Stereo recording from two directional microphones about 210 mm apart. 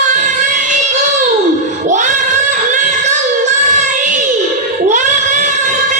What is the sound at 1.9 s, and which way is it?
Child singing, 35° right (ahead or behind).